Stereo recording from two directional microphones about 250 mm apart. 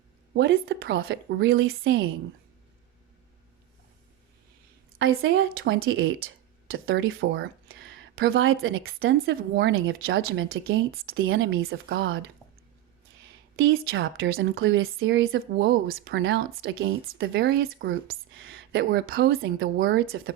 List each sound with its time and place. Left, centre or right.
0.3 s speech: right
4.9 s speech: right
13.6 s speech: right
17.7 s speech: right
18.5 s a sound: right
18.9 s speech: right
19.4 s speech: right